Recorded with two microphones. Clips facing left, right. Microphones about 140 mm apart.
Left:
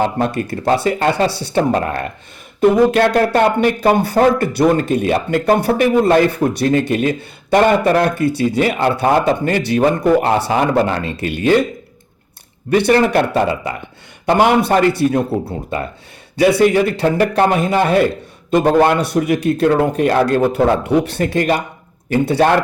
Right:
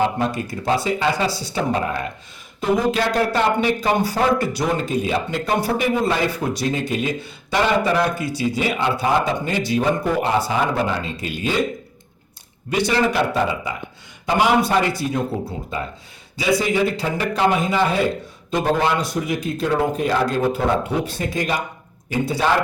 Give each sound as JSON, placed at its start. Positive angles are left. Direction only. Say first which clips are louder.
{"t": 0.2, "sound": "speech", "louder": "left 4 dB", "side_deg": 60}
{"t": 12.7, "sound": "speech", "louder": "left 7 dB", "side_deg": 60}